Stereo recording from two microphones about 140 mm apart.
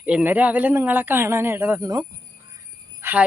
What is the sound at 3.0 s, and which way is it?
Jingle bell, 15° right (ahead or behind).